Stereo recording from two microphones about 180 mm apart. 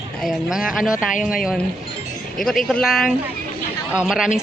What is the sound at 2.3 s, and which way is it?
A woman's voice, centre (ahead or behind).